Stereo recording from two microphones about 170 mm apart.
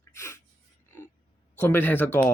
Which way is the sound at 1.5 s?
10° left (ahead or behind).